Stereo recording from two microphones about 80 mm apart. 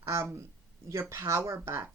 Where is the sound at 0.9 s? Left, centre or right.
Right.